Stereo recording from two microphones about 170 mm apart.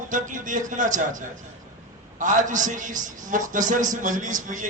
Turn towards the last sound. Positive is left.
turn(degrees=-50)  # may be behind; listen again after turning